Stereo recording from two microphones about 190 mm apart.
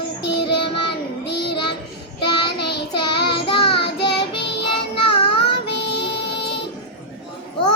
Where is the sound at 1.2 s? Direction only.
60° left (ahead or behind).